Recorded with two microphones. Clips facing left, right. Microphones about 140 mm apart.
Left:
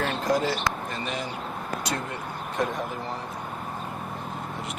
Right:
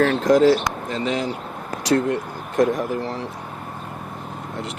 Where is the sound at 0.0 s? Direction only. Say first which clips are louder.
Right 10 dB; 90° right.